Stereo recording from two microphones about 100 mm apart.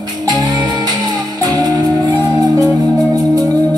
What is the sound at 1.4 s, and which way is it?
Music, 35° right (ahead or behind).